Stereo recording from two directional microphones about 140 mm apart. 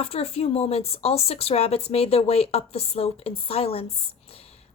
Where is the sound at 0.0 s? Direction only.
45° left (ahead or behind).